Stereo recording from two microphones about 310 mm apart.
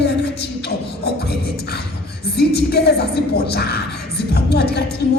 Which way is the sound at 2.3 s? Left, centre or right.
Left.